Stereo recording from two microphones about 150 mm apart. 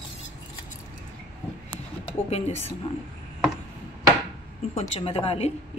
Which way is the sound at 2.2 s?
45° left (ahead or behind).